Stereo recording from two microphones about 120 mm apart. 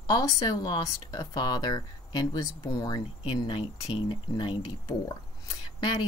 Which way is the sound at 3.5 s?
50° left (ahead or behind).